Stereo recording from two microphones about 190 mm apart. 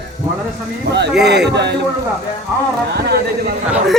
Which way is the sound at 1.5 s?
65° right (ahead or behind).